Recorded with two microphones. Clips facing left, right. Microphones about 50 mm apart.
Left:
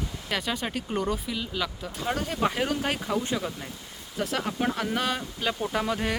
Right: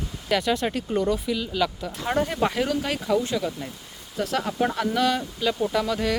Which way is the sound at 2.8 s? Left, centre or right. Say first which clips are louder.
Right 4 dB; left.